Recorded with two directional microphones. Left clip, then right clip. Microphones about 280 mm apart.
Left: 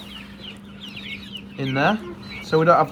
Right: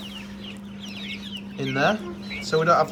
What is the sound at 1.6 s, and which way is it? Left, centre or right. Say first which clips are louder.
Speech: left 2 dB; centre.